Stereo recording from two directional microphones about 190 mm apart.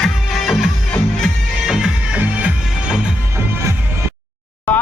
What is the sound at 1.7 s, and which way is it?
Music, 5° right (ahead or behind).